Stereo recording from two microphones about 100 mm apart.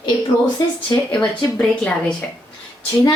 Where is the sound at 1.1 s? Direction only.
15° left (ahead or behind).